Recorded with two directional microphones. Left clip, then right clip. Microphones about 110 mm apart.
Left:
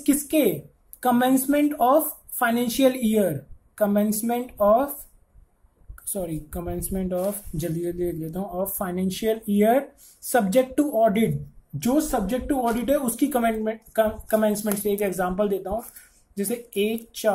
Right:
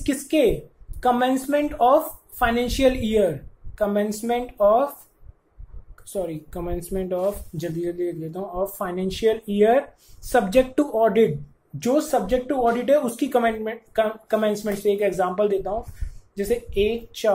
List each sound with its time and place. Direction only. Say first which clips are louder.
0.0 s a woman's voice: right 1 dB; 40° left (ahead or behind)
6.2 s speech: right 2 dB; 35° left (ahead or behind)